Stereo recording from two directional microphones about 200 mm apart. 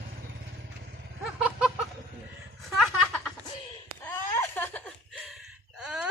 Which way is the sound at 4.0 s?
10° left (ahead or behind).